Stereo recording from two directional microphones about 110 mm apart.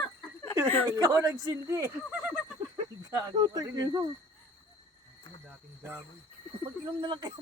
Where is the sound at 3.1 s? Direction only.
35° right (ahead or behind).